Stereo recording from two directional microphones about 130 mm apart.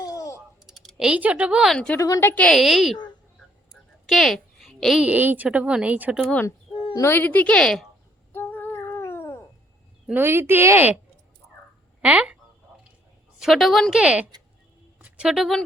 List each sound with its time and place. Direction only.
0.0 s a sound: 25° left (ahead or behind)
0.7 s speech: centre (ahead or behind)
1.7 s a woman's voice: 5° left (ahead or behind)
2.0 s a woman's voice: 25° left (ahead or behind)
2.3 s speech: 10° left (ahead or behind)
2.6 s a woman's voice: centre (ahead or behind)
4.0 s a woman's voice: centre (ahead or behind)
6.9 s speech: 20° left (ahead or behind)
8.3 s a sound: 15° left (ahead or behind)
10.1 s speech: 15° right (ahead or behind)
12.0 s speech: 10° right (ahead or behind)
13.4 s a woman's voice: centre (ahead or behind)